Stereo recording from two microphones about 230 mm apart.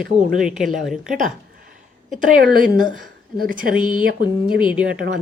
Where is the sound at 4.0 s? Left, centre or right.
Right.